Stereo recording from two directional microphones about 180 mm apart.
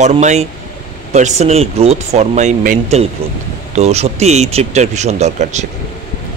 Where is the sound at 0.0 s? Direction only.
40° right (ahead or behind).